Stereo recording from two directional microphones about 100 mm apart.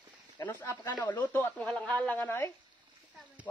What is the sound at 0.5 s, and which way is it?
A man's voice, 25° left (ahead or behind).